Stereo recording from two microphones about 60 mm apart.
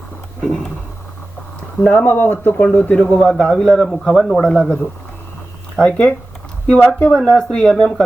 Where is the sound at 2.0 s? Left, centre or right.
Left; by 4.8 s centre.